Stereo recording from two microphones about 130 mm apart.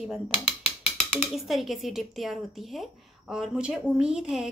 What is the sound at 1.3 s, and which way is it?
Speech, centre (ahead or behind).